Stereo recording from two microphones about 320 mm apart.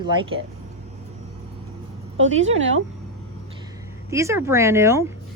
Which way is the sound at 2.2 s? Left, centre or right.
Right.